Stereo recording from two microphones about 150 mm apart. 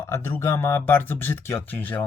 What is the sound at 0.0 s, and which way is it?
Speech, 15° left (ahead or behind).